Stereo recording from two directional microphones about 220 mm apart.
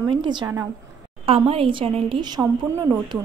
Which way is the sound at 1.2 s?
25° right (ahead or behind).